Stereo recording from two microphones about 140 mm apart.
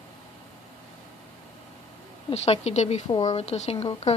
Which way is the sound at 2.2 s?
45° left (ahead or behind).